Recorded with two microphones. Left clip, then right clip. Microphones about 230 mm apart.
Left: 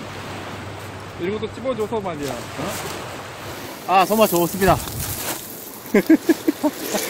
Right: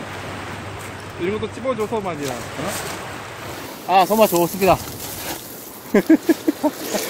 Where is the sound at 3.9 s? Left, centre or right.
Centre.